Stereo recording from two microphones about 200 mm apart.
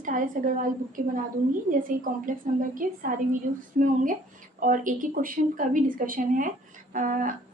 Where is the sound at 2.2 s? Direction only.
45° right (ahead or behind).